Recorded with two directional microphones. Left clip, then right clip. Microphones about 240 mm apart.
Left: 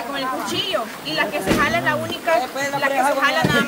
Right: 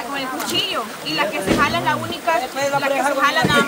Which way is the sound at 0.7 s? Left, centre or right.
Centre.